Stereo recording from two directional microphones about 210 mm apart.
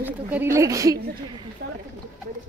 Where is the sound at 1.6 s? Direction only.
45° right (ahead or behind).